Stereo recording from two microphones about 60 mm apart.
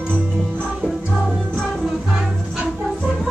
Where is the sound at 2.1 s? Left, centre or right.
Centre.